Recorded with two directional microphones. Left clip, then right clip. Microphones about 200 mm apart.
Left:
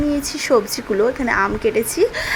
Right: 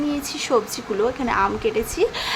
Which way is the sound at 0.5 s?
15° left (ahead or behind).